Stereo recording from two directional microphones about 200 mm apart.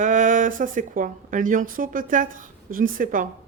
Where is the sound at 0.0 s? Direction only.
40° right (ahead or behind).